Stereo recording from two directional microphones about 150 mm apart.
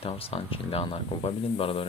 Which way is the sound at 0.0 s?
40° left (ahead or behind).